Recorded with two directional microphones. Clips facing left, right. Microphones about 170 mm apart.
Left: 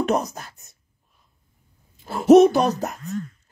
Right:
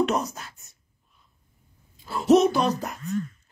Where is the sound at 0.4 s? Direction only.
45° left (ahead or behind).